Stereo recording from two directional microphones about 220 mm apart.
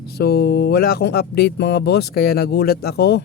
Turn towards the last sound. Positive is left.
turn(degrees=45)  # may be behind; listen again after turning